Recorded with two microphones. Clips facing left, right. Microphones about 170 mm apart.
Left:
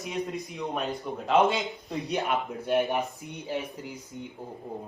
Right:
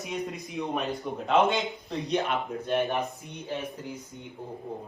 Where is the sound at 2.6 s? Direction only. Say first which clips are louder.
Left 2 dB; 15° left (ahead or behind).